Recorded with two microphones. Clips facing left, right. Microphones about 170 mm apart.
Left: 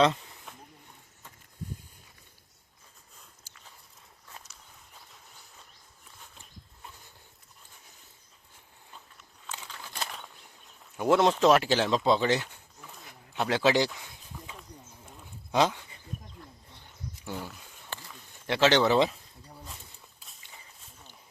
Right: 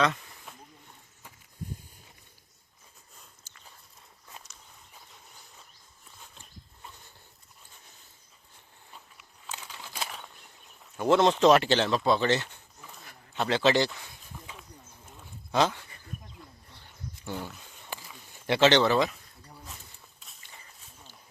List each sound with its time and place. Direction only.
3.5 s dog: 10° left (ahead or behind)
8.9 s a sound: 10° right (ahead or behind)
10.9 s speech: 10° left (ahead or behind)
11.9 s speech: 20° left (ahead or behind)
15.5 s speech: 15° left (ahead or behind)
16.7 s a sound: 15° left (ahead or behind)
17.3 s a sound: centre (ahead or behind)
18.9 s speech: 25° left (ahead or behind)
20.1 s walk: centre (ahead or behind)